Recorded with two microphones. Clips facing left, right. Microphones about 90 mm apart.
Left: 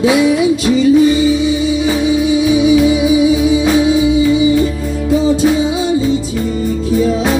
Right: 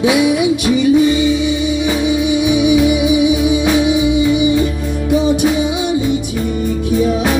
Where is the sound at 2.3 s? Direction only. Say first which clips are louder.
Left 2 dB; 20° right (ahead or behind).